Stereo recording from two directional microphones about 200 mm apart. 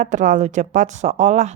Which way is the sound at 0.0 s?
40° right (ahead or behind).